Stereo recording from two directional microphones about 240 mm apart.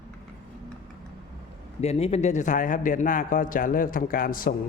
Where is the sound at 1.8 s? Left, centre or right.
Left.